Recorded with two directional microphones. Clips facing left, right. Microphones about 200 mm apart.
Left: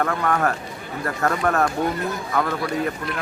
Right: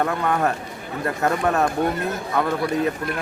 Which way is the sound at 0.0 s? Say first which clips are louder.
Even; 15° right (ahead or behind).